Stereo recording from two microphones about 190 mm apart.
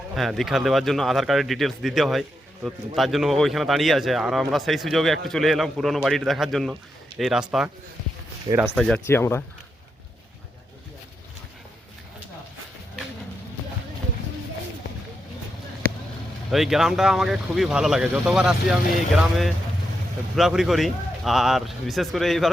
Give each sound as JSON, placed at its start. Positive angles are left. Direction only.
{"t": 0.1, "sound": "speech", "side_deg": 0}
{"t": 8.7, "sound": "speech", "side_deg": 0}
{"t": 9.0, "sound": "speech", "side_deg": 15}
{"t": 16.5, "sound": "speech", "side_deg": 0}